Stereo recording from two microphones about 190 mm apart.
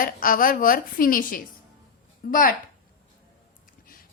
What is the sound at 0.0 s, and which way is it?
A woman's voice, 45° left (ahead or behind).